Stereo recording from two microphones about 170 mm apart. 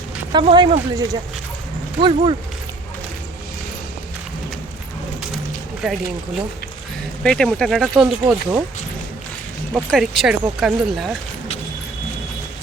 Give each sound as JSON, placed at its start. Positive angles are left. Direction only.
{"t": 0.3, "sound": "speech", "side_deg": -25}
{"t": 5.8, "sound": "speech", "side_deg": 0}
{"t": 7.2, "sound": "speech", "side_deg": 5}
{"t": 9.7, "sound": "speech", "side_deg": 0}